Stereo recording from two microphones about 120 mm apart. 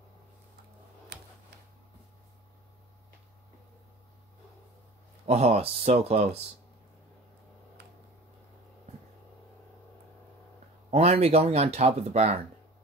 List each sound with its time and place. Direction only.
5.2 s speech: 65° right (ahead or behind)
10.9 s speech: 60° right (ahead or behind)